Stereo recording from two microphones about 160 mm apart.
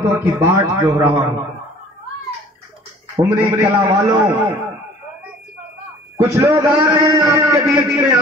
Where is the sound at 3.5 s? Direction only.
30° right (ahead or behind).